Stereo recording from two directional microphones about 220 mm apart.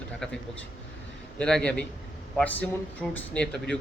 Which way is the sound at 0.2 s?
5° left (ahead or behind).